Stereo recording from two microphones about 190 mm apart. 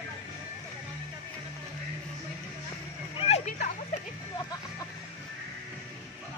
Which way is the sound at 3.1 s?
35° left (ahead or behind).